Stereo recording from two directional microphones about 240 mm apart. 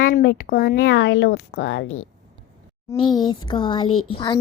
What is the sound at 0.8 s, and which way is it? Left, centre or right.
A woman's voice, left.